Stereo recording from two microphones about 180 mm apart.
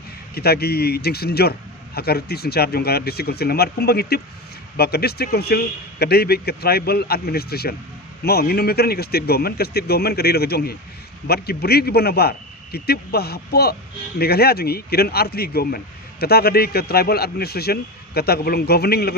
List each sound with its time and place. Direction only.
0.3 s a man's voice: 60° left (ahead or behind)